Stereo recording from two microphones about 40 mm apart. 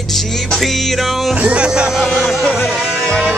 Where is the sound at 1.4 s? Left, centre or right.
Right.